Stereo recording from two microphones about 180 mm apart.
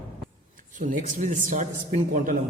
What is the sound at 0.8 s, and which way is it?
A man's voice, 45° right (ahead or behind).